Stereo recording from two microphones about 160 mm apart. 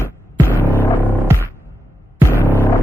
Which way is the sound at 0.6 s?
15° left (ahead or behind).